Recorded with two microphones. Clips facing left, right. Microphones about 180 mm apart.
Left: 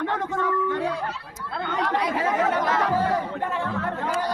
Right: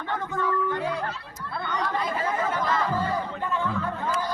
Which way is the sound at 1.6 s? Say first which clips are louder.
Left 3 dB; 80° left.